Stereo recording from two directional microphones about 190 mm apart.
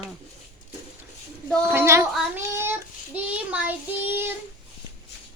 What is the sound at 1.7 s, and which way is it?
Child singing, 15° right (ahead or behind).